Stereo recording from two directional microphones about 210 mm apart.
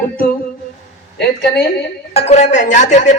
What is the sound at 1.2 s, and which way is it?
Speech, 55° left (ahead or behind).